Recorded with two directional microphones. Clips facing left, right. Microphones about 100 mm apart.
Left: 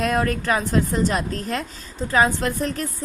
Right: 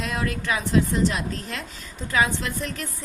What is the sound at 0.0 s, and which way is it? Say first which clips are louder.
A woman's voice: left 6 dB; 45° left (ahead or behind).